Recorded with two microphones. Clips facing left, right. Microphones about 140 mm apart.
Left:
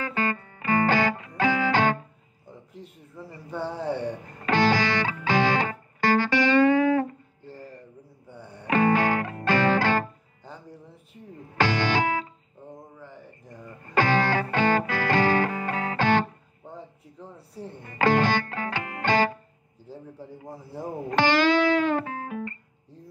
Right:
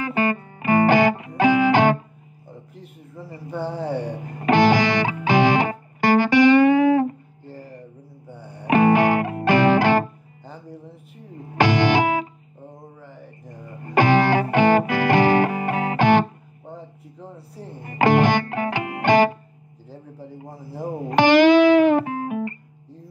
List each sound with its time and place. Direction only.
0.0 s music: 15° right (ahead or behind)
3.4 s speech: centre (ahead or behind)
4.2 s music: 15° right (ahead or behind)
8.6 s music: 15° right (ahead or behind)
11.5 s music: 15° right (ahead or behind)
13.8 s music: 15° right (ahead or behind)
17.8 s music: 15° right (ahead or behind)
20.3 s music: 15° right (ahead or behind)